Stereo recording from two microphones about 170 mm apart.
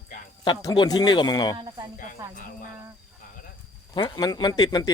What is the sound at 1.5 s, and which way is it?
Speech, 25° right (ahead or behind).